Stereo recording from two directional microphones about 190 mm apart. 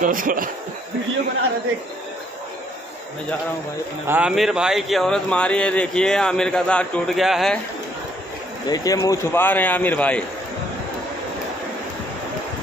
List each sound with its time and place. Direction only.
0.0 s speech: 45° right (ahead or behind)
4.1 s speech: 5° right (ahead or behind)
8.6 s speech: 20° left (ahead or behind)